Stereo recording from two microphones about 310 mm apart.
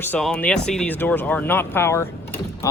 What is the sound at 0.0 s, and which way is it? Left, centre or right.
Speech, centre.